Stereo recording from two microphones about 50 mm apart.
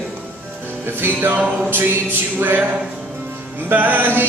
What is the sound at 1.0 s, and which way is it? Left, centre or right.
Music, right.